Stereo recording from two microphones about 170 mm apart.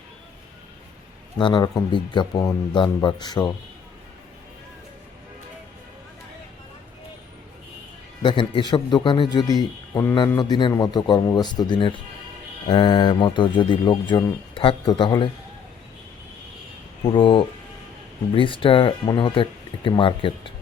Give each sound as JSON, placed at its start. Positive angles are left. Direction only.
{"t": 1.4, "sound": "a man's voice", "side_deg": 30}
{"t": 8.2, "sound": "a man's voice", "side_deg": 30}
{"t": 17.0, "sound": "a man's voice", "side_deg": 30}